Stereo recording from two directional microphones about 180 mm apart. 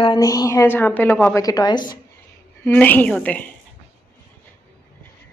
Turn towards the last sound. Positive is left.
turn(degrees=10)  # may be behind; listen again after turning